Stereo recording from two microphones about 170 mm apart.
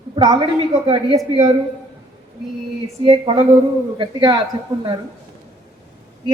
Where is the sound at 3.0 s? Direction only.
30° right (ahead or behind).